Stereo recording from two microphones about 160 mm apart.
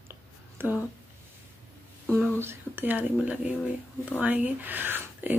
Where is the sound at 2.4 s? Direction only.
15° right (ahead or behind).